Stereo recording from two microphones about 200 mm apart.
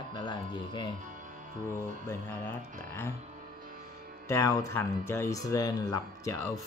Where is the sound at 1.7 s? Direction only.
10° left (ahead or behind).